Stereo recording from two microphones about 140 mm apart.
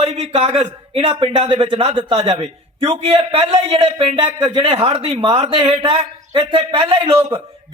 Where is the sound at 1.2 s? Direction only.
40° right (ahead or behind).